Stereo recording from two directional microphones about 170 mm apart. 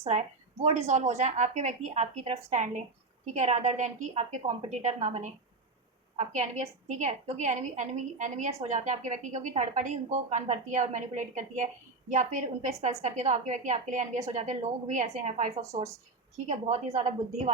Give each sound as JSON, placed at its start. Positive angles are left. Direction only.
{"t": 0.0, "sound": "a woman's voice", "side_deg": -40}